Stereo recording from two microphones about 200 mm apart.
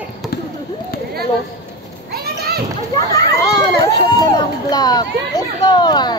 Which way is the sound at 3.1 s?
20° left (ahead or behind).